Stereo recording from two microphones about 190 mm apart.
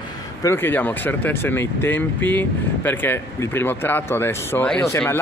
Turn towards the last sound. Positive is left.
turn(degrees=15)  # may be behind; listen again after turning